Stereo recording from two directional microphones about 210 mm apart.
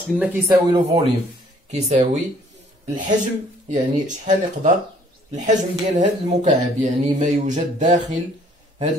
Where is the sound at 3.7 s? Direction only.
35° right (ahead or behind).